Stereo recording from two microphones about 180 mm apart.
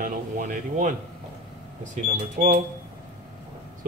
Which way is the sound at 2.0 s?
45° right (ahead or behind).